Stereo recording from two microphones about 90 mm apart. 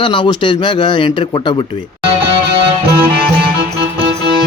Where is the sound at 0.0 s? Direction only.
65° left (ahead or behind).